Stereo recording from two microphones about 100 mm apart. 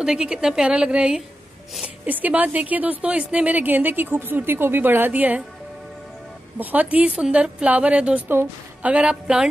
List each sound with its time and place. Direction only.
0.0 s a woman's voice: 10° right (ahead or behind)
6.6 s a woman's voice: 15° right (ahead or behind)